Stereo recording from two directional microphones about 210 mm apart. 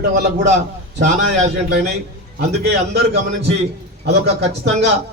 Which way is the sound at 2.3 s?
50° right (ahead or behind).